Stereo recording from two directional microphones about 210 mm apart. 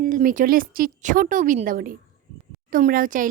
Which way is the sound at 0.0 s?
40° right (ahead or behind).